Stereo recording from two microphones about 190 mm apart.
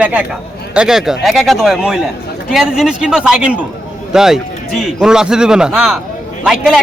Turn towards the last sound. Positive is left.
turn(degrees=0)  # may be behind; listen again after turning